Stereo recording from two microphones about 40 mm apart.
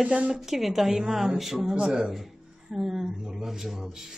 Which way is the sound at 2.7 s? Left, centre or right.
Centre.